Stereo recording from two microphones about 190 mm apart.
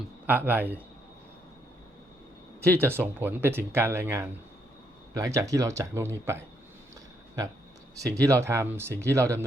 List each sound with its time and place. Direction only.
0.3 s speech: 10° right (ahead or behind)
2.6 s speech: 10° right (ahead or behind)
7.9 s speech: 15° right (ahead or behind)